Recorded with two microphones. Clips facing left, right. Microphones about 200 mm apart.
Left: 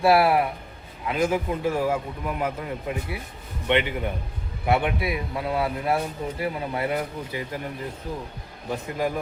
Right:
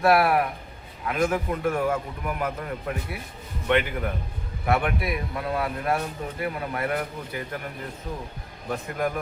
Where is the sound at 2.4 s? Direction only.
15° left (ahead or behind).